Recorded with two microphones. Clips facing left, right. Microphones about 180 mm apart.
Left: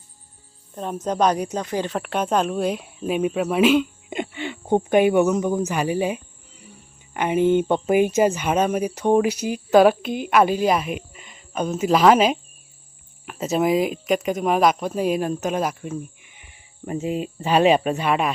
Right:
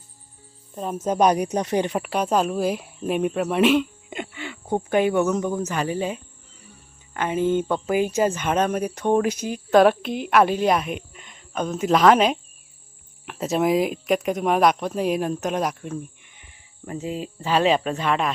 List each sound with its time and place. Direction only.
0.8 s speech: 5° right (ahead or behind)
2.0 s speech: centre (ahead or behind)
4.1 s speech: 20° left (ahead or behind)
8.3 s speech: 10° left (ahead or behind)